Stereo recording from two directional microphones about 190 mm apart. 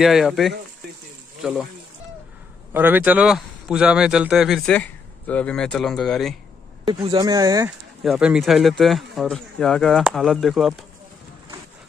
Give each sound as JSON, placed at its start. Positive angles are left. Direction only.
{"t": 0.0, "sound": "speech", "side_deg": 0}
{"t": 2.7, "sound": "speech", "side_deg": -10}
{"t": 6.9, "sound": "speech", "side_deg": -25}
{"t": 8.0, "sound": "speech", "side_deg": -5}